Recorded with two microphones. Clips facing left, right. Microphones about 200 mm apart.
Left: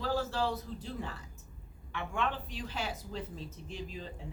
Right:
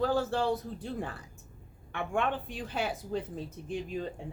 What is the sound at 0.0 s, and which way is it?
A man's voice, 55° right (ahead or behind).